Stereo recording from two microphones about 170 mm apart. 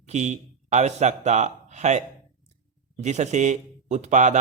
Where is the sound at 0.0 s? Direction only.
45° right (ahead or behind).